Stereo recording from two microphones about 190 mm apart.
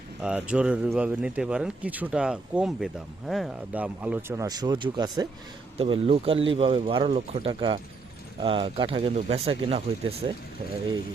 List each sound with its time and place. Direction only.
0.2 s speech: 5° right (ahead or behind)
5.7 s speech: 30° right (ahead or behind)